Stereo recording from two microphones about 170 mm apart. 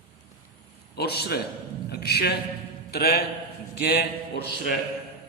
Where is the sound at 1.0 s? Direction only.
70° left (ahead or behind).